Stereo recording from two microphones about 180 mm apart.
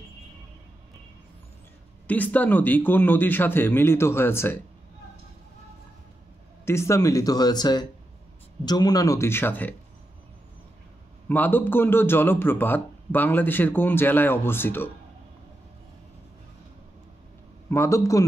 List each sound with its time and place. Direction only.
2.0 s a man's voice: 10° left (ahead or behind)
6.6 s a man's voice: 15° left (ahead or behind)
11.2 s a man's voice: 10° left (ahead or behind)
17.6 s a man's voice: 15° left (ahead or behind)